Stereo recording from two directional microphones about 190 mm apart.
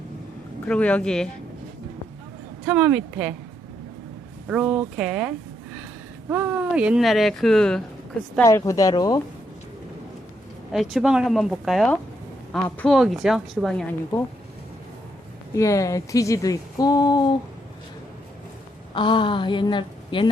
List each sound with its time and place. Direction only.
0.7 s speech: 5° left (ahead or behind)
2.6 s speech: 5° right (ahead or behind)
4.4 s speech: 5° right (ahead or behind)
8.4 s speech: 15° left (ahead or behind)
10.7 s speech: 5° right (ahead or behind)
15.5 s speech: 15° left (ahead or behind)
18.9 s speech: 25° left (ahead or behind)